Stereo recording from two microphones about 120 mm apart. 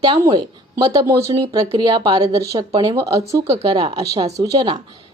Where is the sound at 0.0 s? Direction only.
40° right (ahead or behind).